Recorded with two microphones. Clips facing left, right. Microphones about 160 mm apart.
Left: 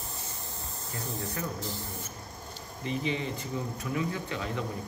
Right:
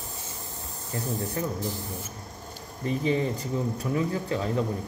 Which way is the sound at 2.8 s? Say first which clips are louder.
Right 6 dB; 40° right (ahead or behind).